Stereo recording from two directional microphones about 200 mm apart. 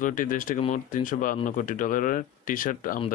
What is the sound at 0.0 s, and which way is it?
Speech, 40° left (ahead or behind).